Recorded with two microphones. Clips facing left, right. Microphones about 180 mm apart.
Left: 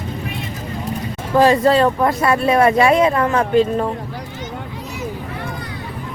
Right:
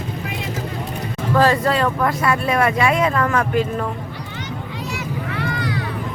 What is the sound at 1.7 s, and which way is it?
Speech, 25° left (ahead or behind).